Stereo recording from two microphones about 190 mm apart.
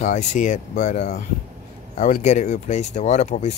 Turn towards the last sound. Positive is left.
turn(degrees=40)  # may be behind; listen again after turning